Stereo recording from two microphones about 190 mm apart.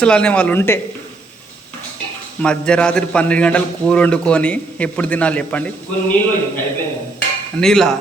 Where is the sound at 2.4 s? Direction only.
5° left (ahead or behind).